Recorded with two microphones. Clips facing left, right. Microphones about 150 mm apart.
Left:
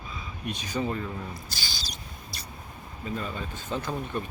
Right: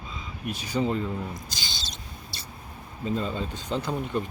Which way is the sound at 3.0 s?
25° right (ahead or behind).